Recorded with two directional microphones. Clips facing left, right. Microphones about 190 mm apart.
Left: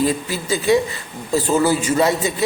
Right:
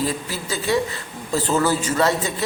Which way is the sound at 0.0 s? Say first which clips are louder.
Left 5 dB; 15° left (ahead or behind).